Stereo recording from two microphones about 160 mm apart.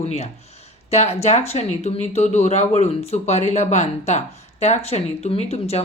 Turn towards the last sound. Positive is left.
turn(degrees=40)  # may be behind; listen again after turning